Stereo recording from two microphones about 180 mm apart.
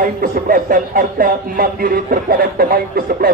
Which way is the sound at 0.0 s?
50° right (ahead or behind).